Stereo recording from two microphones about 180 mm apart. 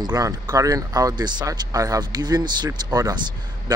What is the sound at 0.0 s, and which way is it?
Speech, 20° right (ahead or behind).